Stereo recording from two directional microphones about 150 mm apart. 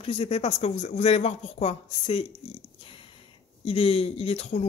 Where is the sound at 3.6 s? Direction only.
40° left (ahead or behind).